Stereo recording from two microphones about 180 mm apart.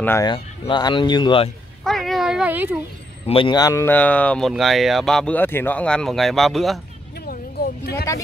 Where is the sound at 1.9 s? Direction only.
Centre (ahead or behind).